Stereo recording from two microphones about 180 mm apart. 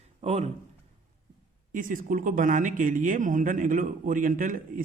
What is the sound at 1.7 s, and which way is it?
A man's voice, 50° right (ahead or behind).